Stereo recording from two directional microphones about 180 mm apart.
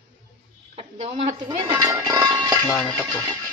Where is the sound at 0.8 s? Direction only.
35° right (ahead or behind).